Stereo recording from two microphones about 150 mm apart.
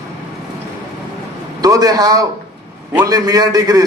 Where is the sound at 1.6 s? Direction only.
25° right (ahead or behind).